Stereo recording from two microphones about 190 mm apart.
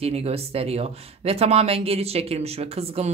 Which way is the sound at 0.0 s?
35° right (ahead or behind).